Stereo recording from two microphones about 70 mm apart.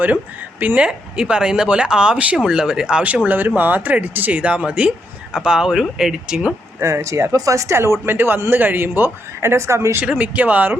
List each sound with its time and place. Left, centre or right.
0.6 s speech: right
0.9 s speech: centre
6.7 s speech: right
8.0 s a man's voice: right
10.0 s speech: right